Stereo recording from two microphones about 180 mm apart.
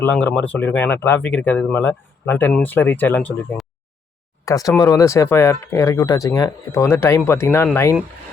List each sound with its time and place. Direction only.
0.0 s speech: 10° left (ahead or behind)
4.4 s speech: 20° left (ahead or behind)